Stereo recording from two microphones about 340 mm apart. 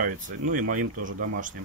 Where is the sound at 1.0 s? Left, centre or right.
Right.